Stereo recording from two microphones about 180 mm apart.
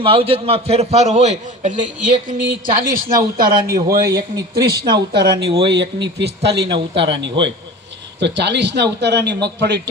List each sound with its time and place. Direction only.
0.0 s a man's voice: 30° right (ahead or behind); by 4.0 s 55° right (ahead or behind)
4.0 s a man's voice: 20° right (ahead or behind)
4.5 s speech: 60° right (ahead or behind)